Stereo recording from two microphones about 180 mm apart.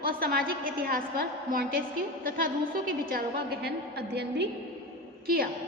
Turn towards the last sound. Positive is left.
turn(degrees=-55)  # may be behind; listen again after turning